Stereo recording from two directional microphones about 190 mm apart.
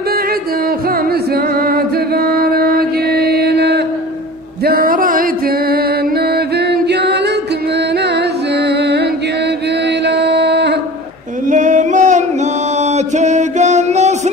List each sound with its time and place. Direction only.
1.6 s music: 55° right (ahead or behind)
6.3 s music: 60° right (ahead or behind)
8.6 s music: 60° right (ahead or behind)
10.0 s mantra: 60° right (ahead or behind)
11.5 s singing: 40° right (ahead or behind)
12.9 s music: 40° right (ahead or behind)